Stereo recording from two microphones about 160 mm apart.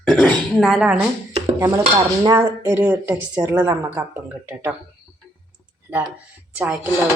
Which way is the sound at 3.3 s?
25° right (ahead or behind).